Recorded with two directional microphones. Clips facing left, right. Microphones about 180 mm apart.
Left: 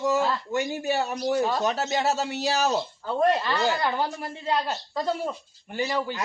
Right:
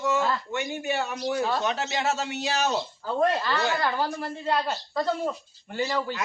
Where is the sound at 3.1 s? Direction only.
15° left (ahead or behind).